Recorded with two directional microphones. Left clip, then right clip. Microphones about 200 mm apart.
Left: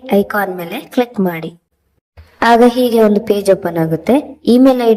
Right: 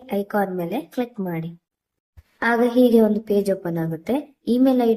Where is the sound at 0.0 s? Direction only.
45° left (ahead or behind).